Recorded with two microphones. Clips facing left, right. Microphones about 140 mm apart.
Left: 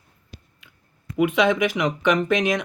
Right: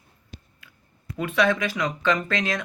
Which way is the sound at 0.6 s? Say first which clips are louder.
Even; 20° left (ahead or behind).